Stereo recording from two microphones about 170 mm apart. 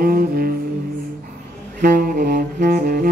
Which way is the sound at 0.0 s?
60° right (ahead or behind).